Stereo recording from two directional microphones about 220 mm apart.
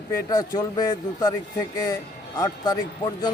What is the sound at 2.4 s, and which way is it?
Speech, 20° left (ahead or behind).